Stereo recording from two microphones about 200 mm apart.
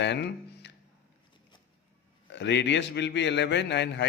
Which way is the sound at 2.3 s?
60° left (ahead or behind).